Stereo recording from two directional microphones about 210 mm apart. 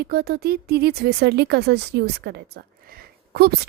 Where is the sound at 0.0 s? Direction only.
45° right (ahead or behind).